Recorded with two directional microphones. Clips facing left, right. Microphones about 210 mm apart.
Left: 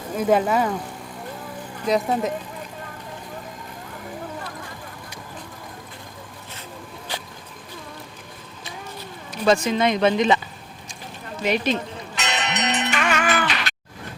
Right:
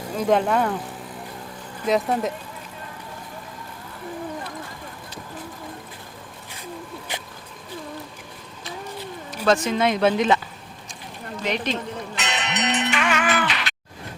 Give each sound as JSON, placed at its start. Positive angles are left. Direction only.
{"t": 0.2, "sound": "speech", "side_deg": 5}
{"t": 1.9, "sound": "speech", "side_deg": 0}
{"t": 7.1, "sound": "a sound", "side_deg": -20}
{"t": 9.6, "sound": "speech", "side_deg": -5}
{"t": 11.4, "sound": "speech", "side_deg": 5}
{"t": 12.1, "sound": "music", "side_deg": 40}